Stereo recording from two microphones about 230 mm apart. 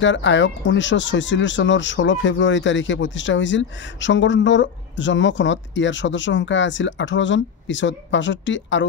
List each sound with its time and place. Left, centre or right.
0.0 s speech: left